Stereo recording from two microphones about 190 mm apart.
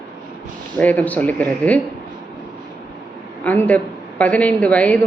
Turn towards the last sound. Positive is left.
turn(degrees=5)  # may be behind; listen again after turning